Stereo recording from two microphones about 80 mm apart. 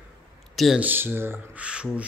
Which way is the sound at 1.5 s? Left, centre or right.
Centre.